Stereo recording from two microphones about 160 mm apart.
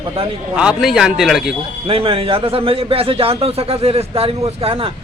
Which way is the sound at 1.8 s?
35° right (ahead or behind).